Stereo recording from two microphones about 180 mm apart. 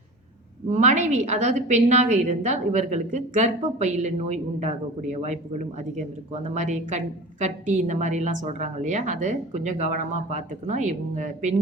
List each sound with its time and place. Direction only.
0.7 s a woman's voice: 40° right (ahead or behind)
6.5 s a woman's voice: 40° right (ahead or behind)